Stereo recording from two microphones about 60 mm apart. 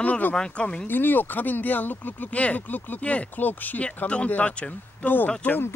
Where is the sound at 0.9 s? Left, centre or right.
Left.